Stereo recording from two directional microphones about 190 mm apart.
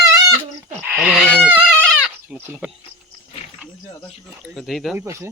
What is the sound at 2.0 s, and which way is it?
Goat, 5° right (ahead or behind).